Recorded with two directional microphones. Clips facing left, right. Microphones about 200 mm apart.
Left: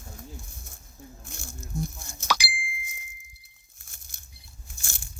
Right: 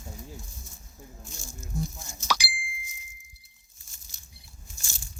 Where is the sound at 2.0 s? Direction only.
60° left (ahead or behind).